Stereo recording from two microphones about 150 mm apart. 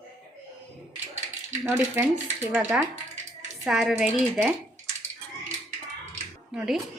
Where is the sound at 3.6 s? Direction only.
Centre (ahead or behind).